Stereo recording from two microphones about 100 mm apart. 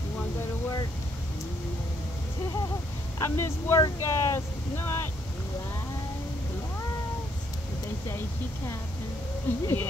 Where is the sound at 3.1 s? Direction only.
25° left (ahead or behind).